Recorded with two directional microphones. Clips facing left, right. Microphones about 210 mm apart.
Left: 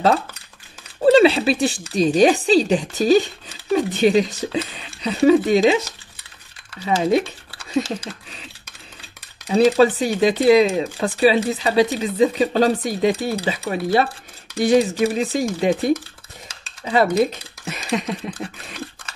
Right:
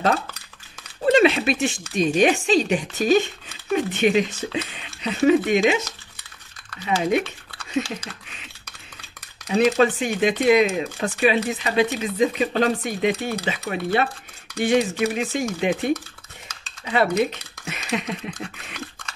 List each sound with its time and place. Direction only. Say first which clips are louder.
1.0 s speech: left 4 dB; 30° left (ahead or behind)
9.5 s speech: left 4 dB; 35° left (ahead or behind)